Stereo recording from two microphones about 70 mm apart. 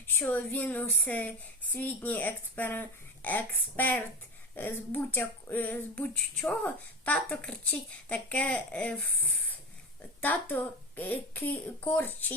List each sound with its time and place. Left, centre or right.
0.3 s speech: left
10.2 s speech: left